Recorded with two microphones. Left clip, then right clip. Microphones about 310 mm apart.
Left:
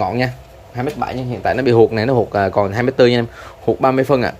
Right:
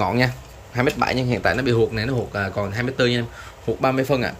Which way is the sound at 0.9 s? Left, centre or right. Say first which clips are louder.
Right 1 dB; right.